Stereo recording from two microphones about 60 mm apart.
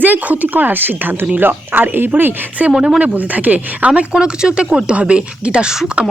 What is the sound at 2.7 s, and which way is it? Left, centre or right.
Speech, centre.